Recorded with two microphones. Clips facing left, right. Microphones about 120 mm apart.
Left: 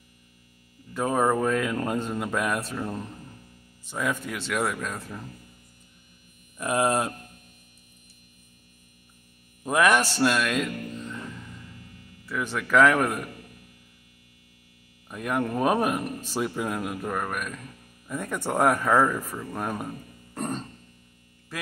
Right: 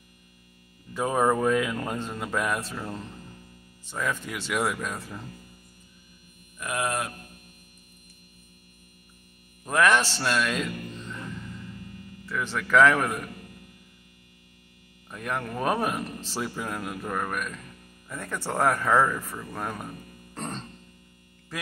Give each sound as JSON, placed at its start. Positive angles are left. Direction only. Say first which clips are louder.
{"t": 0.9, "sound": "speech", "louder": "even", "side_deg": 0}
{"t": 6.6, "sound": "speech", "louder": "left 5 dB", "side_deg": 30}
{"t": 9.6, "sound": "music", "louder": "left 1 dB", "side_deg": 15}
{"t": 12.3, "sound": "speech", "louder": "even", "side_deg": 5}
{"t": 15.0, "sound": "speech", "louder": "left 4 dB", "side_deg": 5}
{"t": 20.3, "sound": "music", "louder": "left 4 dB", "side_deg": 10}